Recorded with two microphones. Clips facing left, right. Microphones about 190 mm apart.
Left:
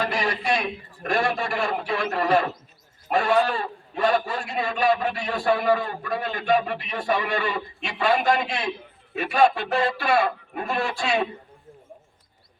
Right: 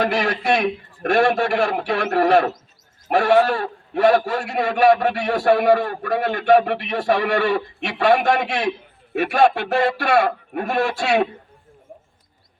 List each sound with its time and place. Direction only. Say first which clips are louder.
0.0 s a man's voice: right 5 dB; 70° right (ahead or behind)